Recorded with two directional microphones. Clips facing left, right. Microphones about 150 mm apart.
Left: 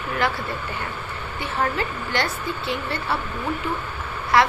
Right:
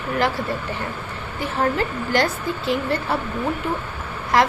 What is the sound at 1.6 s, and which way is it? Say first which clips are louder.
A woman's voice: right 3 dB; 45° right (ahead or behind).